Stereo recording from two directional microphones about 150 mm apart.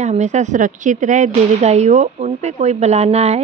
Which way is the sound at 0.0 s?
50° right (ahead or behind).